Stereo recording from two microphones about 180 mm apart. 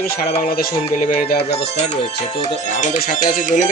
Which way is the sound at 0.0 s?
55° left (ahead or behind).